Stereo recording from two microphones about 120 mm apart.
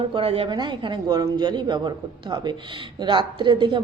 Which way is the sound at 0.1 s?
50° right (ahead or behind).